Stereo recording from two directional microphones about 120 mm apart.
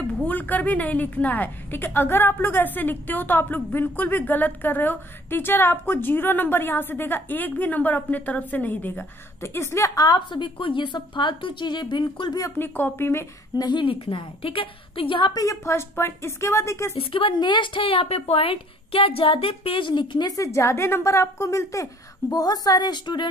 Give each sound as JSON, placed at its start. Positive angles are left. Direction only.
{"t": 0.0, "sound": "a woman's voice", "side_deg": 15}
{"t": 12.4, "sound": "speech", "side_deg": 20}
{"t": 13.7, "sound": "speech", "side_deg": 45}
{"t": 15.4, "sound": "speech", "side_deg": 20}
{"t": 16.9, "sound": "a woman's voice", "side_deg": 45}